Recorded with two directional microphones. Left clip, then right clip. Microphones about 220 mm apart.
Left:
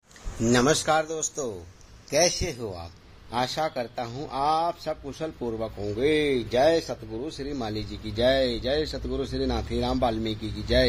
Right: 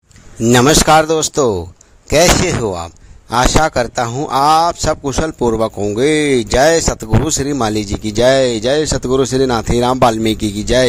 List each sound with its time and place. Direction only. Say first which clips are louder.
0.5 s speech: right 13 dB; 45° right (ahead or behind)